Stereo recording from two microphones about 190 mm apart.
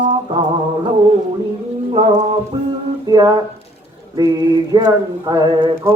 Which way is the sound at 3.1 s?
20° right (ahead or behind).